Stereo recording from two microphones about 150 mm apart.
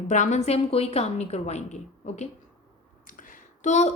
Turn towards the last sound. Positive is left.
turn(degrees=50)  # may be behind; listen again after turning